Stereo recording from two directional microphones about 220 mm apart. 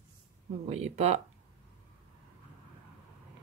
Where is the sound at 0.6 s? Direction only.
30° right (ahead or behind).